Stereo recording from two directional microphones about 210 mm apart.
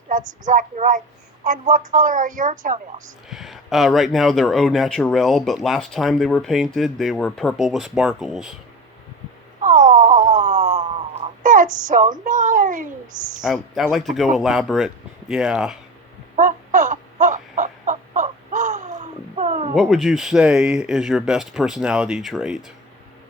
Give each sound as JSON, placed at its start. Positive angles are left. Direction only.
{"t": 0.1, "sound": "a woman's voice", "side_deg": -40}
{"t": 3.2, "sound": "speech", "side_deg": 0}
{"t": 9.6, "sound": "a sound", "side_deg": -40}
{"t": 13.4, "sound": "speech", "side_deg": -5}
{"t": 16.3, "sound": "a sound", "side_deg": -40}
{"t": 19.7, "sound": "speech", "side_deg": 0}